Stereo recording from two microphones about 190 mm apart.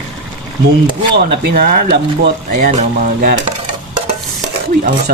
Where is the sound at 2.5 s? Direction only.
45° right (ahead or behind).